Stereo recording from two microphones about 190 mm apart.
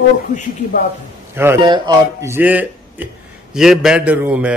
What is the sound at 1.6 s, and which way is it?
A man's voice, 25° right (ahead or behind).